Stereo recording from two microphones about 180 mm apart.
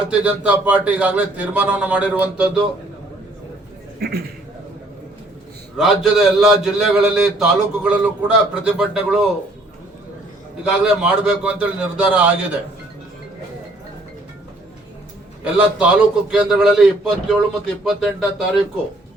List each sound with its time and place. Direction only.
0.1 s a man's voice: 5° right (ahead or behind)
4.0 s a man's voice: 60° right (ahead or behind)
5.7 s a man's voice: centre (ahead or behind)
10.6 s a man's voice: 5° right (ahead or behind)
15.4 s a man's voice: 5° right (ahead or behind)